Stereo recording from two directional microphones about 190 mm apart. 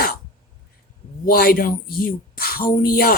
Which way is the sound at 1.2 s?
50° left (ahead or behind).